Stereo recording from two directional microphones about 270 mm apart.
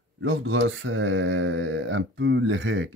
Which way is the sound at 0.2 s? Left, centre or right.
Right.